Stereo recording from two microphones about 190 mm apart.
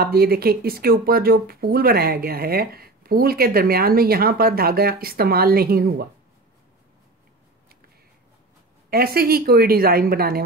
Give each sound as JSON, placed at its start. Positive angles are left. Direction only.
{"t": 0.0, "sound": "speech", "side_deg": -55}
{"t": 8.9, "sound": "speech", "side_deg": -55}